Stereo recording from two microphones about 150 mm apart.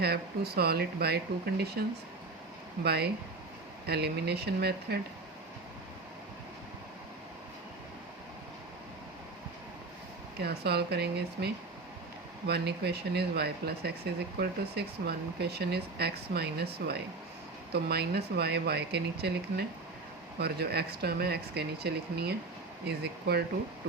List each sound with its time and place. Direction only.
0.0 s speech: 90° right
2.8 s speech: 90° right
10.3 s speech: 90° right